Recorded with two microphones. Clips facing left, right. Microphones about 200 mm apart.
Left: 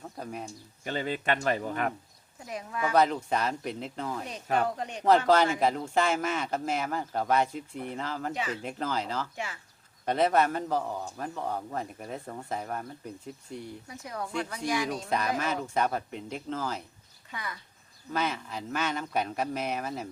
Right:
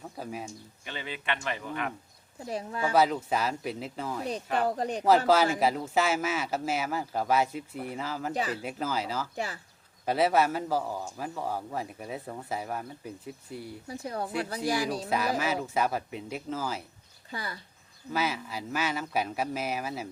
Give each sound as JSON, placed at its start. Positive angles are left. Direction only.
{"t": 0.2, "sound": "speech", "side_deg": -5}
{"t": 0.9, "sound": "speech", "side_deg": 45}
{"t": 2.5, "sound": "speech", "side_deg": -30}
{"t": 2.9, "sound": "a man's voice", "side_deg": -5}
{"t": 4.5, "sound": "speech", "side_deg": -35}
{"t": 5.5, "sound": "a man's voice", "side_deg": -5}
{"t": 8.3, "sound": "speech", "side_deg": -35}
{"t": 8.6, "sound": "speech", "side_deg": -5}
{"t": 9.3, "sound": "speech", "side_deg": -35}
{"t": 10.1, "sound": "a man's voice", "side_deg": -5}
{"t": 13.8, "sound": "speech", "side_deg": -30}
{"t": 15.1, "sound": "a man's voice", "side_deg": -5}
{"t": 17.3, "sound": "speech", "side_deg": -35}
{"t": 18.1, "sound": "a man's voice", "side_deg": -5}